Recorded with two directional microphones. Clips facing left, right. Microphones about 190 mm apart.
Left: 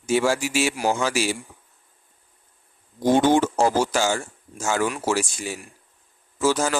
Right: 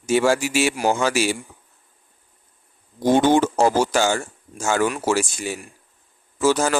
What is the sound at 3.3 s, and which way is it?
Speech, 65° right (ahead or behind).